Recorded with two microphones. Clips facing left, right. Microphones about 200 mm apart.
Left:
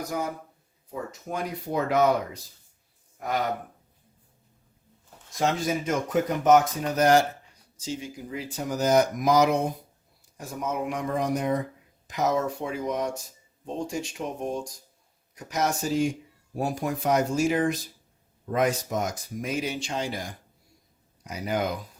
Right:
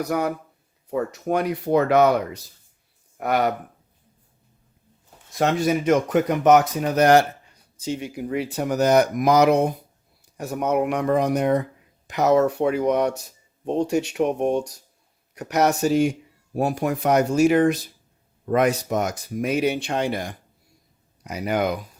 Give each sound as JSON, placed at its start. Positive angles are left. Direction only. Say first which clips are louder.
{"t": 0.0, "sound": "speech", "louder": "right 7 dB", "side_deg": -70}
{"t": 5.4, "sound": "speech", "louder": "right 5 dB", "side_deg": -65}